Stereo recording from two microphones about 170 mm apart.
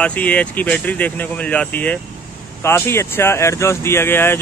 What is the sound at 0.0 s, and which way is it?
Speech, 10° left (ahead or behind).